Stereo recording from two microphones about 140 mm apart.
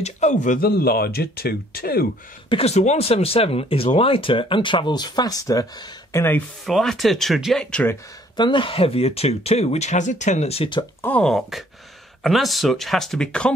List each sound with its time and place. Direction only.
0.0 s speech: 55° left (ahead or behind); by 2.0 s 90° left
2.5 s speech: 50° left (ahead or behind); by 6.2 s 25° left (ahead or behind)
6.6 s speech: centre (ahead or behind)
8.4 s speech: 35° left (ahead or behind)
11.0 s speech: 10° left (ahead or behind)